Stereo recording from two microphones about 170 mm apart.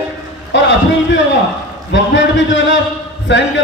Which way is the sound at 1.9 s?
90° left.